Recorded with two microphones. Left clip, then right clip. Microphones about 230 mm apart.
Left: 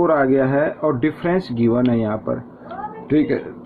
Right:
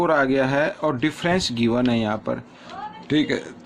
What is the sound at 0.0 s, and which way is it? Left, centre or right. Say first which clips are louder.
Speech: left 3 dB; right.